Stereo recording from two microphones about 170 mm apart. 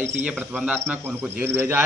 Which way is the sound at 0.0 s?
10° right (ahead or behind).